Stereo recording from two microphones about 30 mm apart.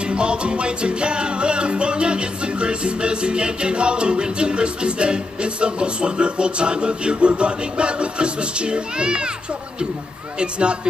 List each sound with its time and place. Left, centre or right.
0.0 s music: right
10.4 s music: right